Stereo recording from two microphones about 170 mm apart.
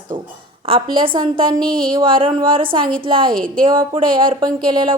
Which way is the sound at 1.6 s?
60° right (ahead or behind).